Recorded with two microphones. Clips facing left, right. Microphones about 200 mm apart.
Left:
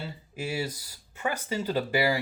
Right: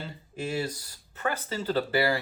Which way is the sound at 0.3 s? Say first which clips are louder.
Right 1 dB; 10° left (ahead or behind).